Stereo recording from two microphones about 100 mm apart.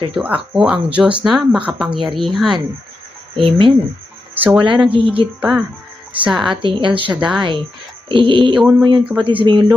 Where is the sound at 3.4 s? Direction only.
50° right (ahead or behind).